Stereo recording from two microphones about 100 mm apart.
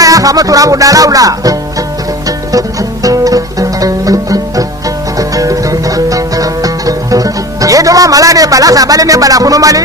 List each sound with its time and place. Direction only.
0.0 s speech: 35° right (ahead or behind)
2.5 s music: 35° right (ahead or behind)